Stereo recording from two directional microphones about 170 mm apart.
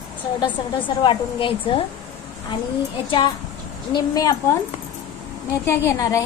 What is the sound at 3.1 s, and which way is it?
A woman's voice, 25° left (ahead or behind).